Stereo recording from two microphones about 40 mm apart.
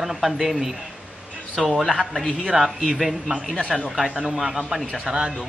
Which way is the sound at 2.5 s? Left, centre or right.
Centre.